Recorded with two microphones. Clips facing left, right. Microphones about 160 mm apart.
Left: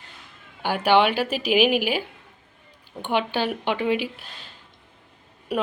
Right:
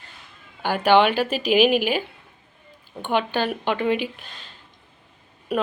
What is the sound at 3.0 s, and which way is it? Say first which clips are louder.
Speech: right 1 dB; 10° left (ahead or behind).